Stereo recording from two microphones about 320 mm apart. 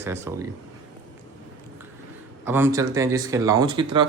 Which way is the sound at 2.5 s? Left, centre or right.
Centre.